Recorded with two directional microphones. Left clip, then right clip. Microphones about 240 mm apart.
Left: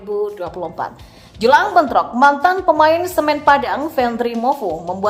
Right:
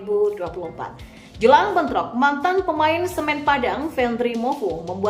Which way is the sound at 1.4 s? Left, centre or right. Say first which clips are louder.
Left 3 dB; centre.